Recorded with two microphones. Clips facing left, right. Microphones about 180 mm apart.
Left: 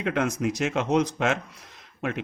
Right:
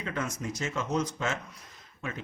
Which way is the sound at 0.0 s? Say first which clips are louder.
Left 9 dB; 70° left (ahead or behind).